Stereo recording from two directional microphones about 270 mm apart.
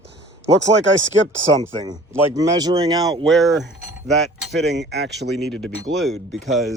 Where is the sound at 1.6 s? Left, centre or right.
Centre.